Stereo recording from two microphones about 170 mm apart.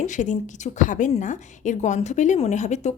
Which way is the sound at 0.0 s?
45° left (ahead or behind).